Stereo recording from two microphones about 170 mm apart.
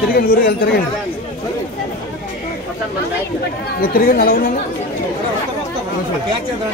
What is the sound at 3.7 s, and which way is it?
Speech, 60° left (ahead or behind).